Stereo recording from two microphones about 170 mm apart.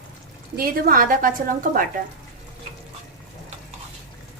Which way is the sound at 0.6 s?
55° right (ahead or behind).